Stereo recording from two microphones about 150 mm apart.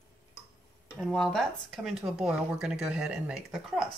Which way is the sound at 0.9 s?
Centre (ahead or behind).